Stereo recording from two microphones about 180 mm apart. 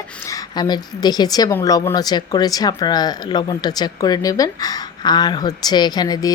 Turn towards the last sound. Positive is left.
turn(degrees=20)  # may be behind; listen again after turning